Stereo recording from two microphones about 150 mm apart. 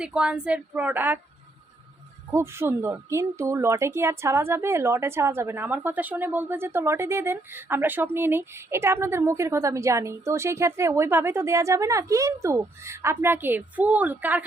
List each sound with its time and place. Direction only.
0.0 s a woman's voice: 5° right (ahead or behind)
2.3 s a woman's voice: 15° right (ahead or behind)